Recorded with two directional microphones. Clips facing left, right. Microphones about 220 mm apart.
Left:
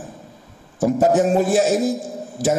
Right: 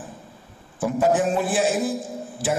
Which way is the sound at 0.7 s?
40° left (ahead or behind).